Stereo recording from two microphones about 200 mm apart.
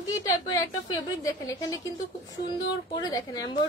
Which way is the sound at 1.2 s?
15° left (ahead or behind).